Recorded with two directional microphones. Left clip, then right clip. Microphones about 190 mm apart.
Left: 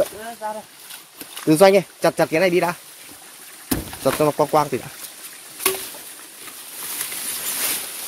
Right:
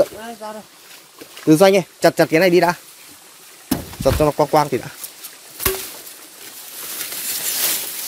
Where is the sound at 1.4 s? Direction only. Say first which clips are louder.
Right 1 dB; 20° right (ahead or behind).